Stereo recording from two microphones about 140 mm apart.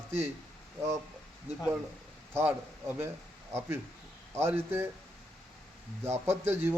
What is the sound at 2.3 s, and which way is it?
Speech, 15° right (ahead or behind).